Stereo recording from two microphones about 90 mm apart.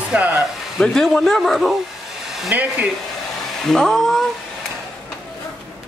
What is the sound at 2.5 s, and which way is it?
Speech, 20° right (ahead or behind).